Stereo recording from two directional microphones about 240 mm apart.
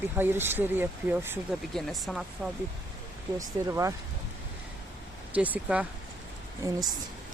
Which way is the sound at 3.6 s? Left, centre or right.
Centre.